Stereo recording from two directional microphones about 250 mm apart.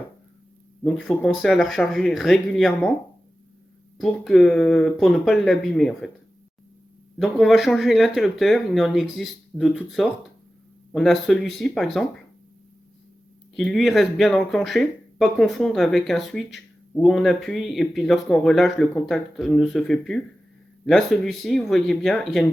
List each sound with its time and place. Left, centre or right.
0.9 s speech: centre
3.9 s speech: centre
7.2 s speech: centre
13.6 s speech: centre